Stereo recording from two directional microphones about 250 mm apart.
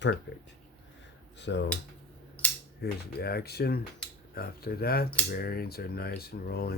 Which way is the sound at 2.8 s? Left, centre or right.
Left.